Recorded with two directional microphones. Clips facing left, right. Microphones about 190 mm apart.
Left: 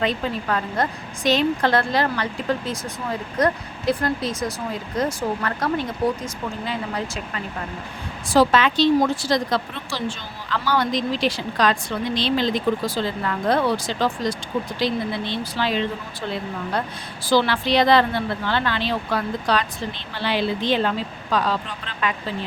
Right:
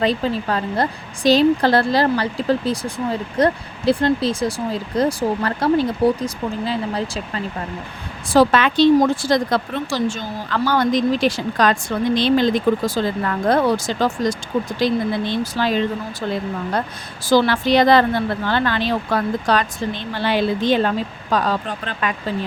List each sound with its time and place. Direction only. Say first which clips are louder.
0.0 s a woman's voice: right 4 dB; 35° right (ahead or behind)
8.3 s speech: right 2 dB; 55° right (ahead or behind)
17.2 s speech: right 4 dB; 45° right (ahead or behind)